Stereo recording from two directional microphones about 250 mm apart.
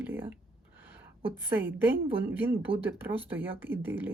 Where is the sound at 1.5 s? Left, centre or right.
Centre.